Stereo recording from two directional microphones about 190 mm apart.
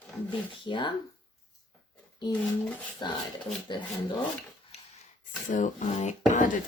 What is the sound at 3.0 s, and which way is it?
Speech, 20° left (ahead or behind).